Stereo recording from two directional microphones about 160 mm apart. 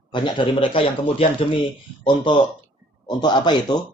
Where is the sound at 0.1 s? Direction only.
30° left (ahead or behind).